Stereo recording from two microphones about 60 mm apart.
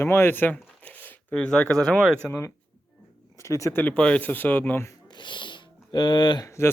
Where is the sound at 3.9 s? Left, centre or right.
Centre; by 4.8 s left.